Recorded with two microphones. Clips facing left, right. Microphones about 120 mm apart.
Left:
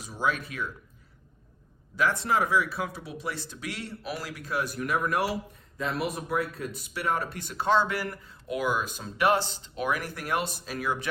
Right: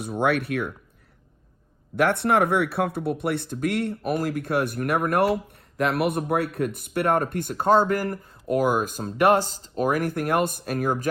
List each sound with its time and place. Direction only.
0.0 s speech: 60° right (ahead or behind)
2.0 s speech: 65° right (ahead or behind); by 11.1 s 45° right (ahead or behind)